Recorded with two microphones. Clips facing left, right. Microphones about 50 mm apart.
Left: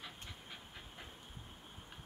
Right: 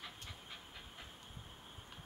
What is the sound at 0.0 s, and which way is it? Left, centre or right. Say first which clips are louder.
Pant: even; centre.